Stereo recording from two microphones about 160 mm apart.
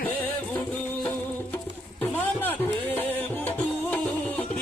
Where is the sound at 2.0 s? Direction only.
10° left (ahead or behind).